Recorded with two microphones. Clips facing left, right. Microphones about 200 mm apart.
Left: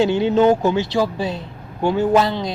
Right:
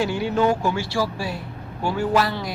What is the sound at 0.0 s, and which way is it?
A man's voice, 25° left (ahead or behind).